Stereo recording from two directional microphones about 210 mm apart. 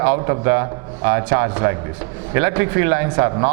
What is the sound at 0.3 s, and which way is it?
Speech, 15° right (ahead or behind).